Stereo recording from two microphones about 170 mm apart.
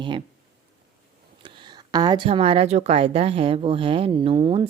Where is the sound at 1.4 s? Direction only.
25° right (ahead or behind).